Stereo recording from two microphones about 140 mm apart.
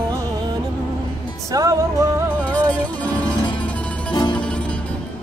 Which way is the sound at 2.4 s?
10° left (ahead or behind).